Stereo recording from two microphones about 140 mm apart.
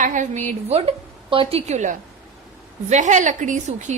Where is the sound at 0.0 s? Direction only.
65° right (ahead or behind).